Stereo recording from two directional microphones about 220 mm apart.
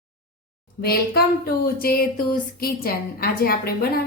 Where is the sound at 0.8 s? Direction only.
45° left (ahead or behind).